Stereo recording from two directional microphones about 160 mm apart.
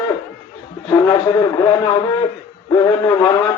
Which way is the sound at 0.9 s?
25° left (ahead or behind).